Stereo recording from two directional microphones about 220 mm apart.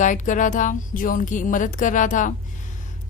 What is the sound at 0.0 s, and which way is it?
Speech, 35° left (ahead or behind).